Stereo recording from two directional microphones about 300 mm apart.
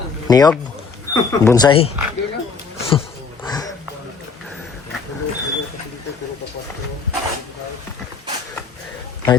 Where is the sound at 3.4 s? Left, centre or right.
Centre.